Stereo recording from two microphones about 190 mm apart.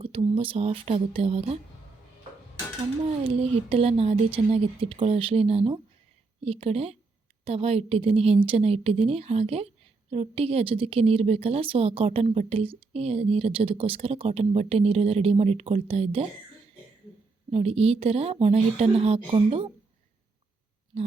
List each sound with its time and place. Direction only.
0.0 s a woman's voice: 30° right (ahead or behind)
3.2 s a woman's voice: 30° right (ahead or behind)
17.5 s a woman's voice: 30° right (ahead or behind)